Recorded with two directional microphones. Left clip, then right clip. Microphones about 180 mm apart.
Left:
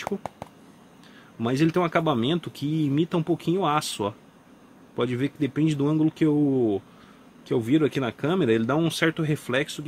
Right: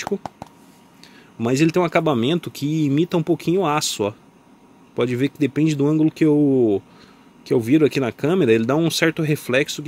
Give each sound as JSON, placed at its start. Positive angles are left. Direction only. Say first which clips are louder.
{"t": 1.4, "sound": "speech", "louder": "right 5 dB", "side_deg": -25}